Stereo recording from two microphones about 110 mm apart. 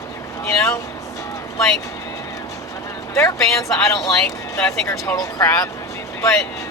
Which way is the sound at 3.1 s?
30° left (ahead or behind).